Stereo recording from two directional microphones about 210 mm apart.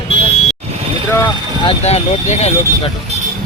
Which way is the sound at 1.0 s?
10° left (ahead or behind).